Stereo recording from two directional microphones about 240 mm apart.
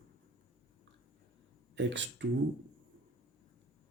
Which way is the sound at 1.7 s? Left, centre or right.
Right.